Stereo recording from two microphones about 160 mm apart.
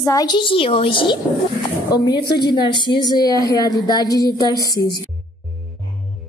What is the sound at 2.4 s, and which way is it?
A woman's voice, 30° left (ahead or behind).